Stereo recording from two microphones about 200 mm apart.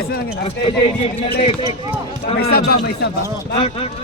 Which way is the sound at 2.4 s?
50° left (ahead or behind).